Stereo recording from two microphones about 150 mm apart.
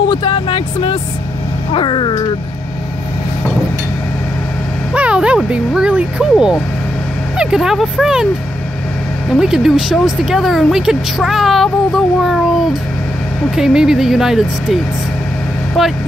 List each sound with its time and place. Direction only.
0.1 s speech: 30° left (ahead or behind)
4.9 s speech: 5° right (ahead or behind)
9.3 s speech: 5° right (ahead or behind)
13.6 s speech: 5° right (ahead or behind)